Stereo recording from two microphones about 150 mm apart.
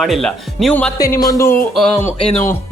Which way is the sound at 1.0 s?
25° left (ahead or behind).